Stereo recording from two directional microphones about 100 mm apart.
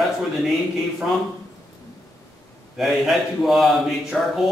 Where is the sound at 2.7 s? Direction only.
Centre (ahead or behind).